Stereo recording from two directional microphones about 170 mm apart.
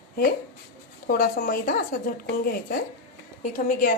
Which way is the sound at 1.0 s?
60° left (ahead or behind).